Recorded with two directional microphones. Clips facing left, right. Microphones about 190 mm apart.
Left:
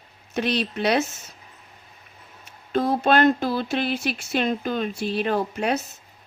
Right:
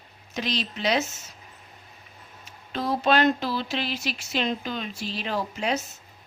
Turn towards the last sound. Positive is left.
turn(degrees=55)  # may be behind; listen again after turning